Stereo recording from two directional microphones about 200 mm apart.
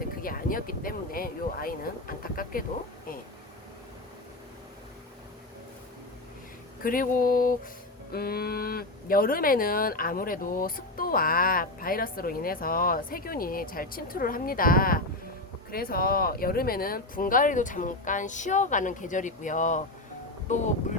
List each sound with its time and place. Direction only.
0.2 s speech: 45° left (ahead or behind)
6.8 s speech: 45° left (ahead or behind)